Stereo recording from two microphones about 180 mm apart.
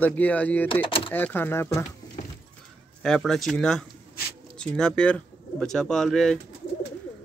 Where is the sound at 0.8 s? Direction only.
30° left (ahead or behind).